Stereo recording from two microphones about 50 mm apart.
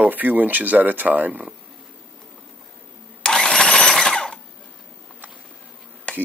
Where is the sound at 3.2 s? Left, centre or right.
Centre.